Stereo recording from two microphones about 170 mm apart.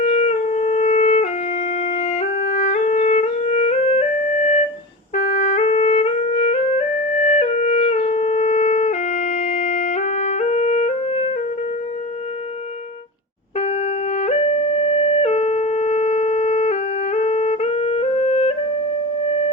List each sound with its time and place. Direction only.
0.0 s music: 40° left (ahead or behind)
13.6 s music: 40° left (ahead or behind)